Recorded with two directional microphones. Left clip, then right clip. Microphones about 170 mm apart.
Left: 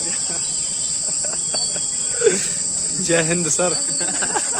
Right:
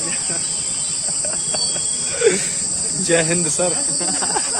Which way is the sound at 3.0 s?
50° left (ahead or behind).